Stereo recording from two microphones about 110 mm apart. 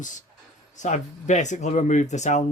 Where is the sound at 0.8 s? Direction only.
90° left.